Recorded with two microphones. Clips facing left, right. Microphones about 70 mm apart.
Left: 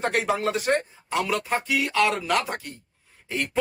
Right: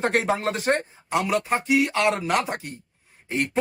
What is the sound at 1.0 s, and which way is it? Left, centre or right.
Speech, centre.